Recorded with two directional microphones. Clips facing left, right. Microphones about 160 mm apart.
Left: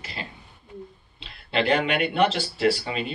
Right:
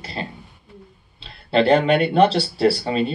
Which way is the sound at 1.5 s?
35° right (ahead or behind).